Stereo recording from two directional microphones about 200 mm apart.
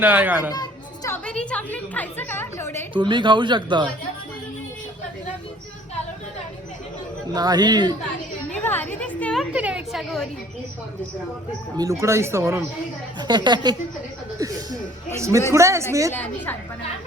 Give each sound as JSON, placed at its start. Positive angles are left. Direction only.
{"t": 0.0, "sound": "speech", "side_deg": -10}
{"t": 0.5, "sound": "chatter", "side_deg": 15}
{"t": 2.9, "sound": "speech", "side_deg": -25}
{"t": 7.3, "sound": "speech", "side_deg": -20}
{"t": 8.6, "sound": "a woman's voice", "side_deg": 10}
{"t": 11.8, "sound": "speech", "side_deg": -15}
{"t": 16.1, "sound": "a woman's voice", "side_deg": 10}